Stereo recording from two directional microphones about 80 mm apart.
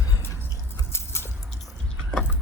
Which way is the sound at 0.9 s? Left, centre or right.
Left.